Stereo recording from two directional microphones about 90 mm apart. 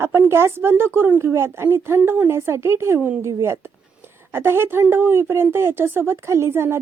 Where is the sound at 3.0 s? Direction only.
20° right (ahead or behind).